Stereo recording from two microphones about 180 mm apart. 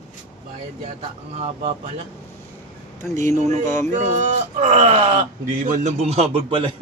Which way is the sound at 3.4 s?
40° right (ahead or behind).